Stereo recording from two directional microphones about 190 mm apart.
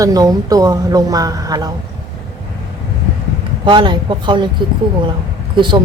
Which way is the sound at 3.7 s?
25° right (ahead or behind).